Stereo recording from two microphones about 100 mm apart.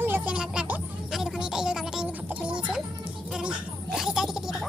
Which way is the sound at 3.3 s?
10° right (ahead or behind).